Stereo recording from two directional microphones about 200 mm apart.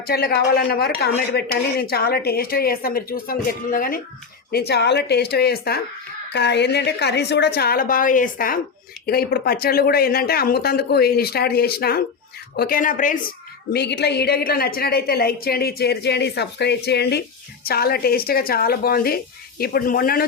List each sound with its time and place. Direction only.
0.1 s a woman's voice: 50° left (ahead or behind)
13.7 s a woman's voice: 55° left (ahead or behind)